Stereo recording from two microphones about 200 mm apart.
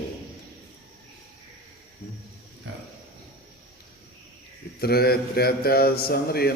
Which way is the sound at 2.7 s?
65° right (ahead or behind).